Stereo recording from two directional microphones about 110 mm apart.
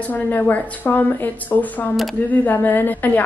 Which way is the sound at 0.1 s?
15° left (ahead or behind).